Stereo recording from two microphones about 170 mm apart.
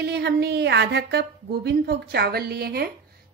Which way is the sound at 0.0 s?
75° right (ahead or behind).